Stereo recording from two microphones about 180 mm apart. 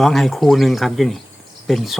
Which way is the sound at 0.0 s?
Centre (ahead or behind).